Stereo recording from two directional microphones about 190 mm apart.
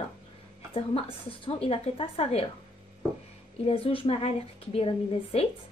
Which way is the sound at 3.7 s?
30° left (ahead or behind).